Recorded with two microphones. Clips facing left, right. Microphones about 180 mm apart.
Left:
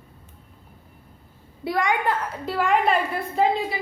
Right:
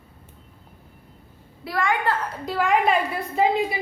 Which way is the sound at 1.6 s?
20° left (ahead or behind).